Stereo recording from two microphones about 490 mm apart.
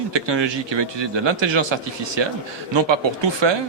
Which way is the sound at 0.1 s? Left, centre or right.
Right.